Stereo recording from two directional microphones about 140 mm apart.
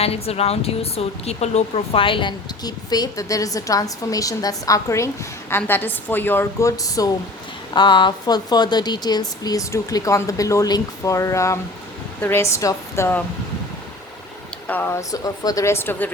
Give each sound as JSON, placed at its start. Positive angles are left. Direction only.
{"t": 0.0, "sound": "speech", "side_deg": 45}
{"t": 14.7, "sound": "speech", "side_deg": 15}